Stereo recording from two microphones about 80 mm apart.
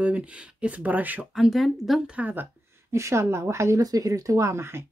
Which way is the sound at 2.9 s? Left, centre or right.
Right.